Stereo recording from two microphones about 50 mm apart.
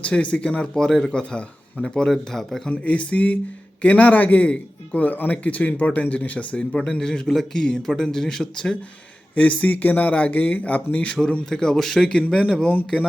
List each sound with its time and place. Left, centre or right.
0.0 s speech: left
0.8 s speech: centre
2.6 s speech: left; by 8.7 s centre
9.3 s speech: left
10.9 s speech: left